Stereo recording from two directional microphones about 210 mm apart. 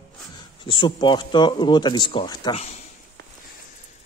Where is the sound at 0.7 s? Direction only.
20° left (ahead or behind).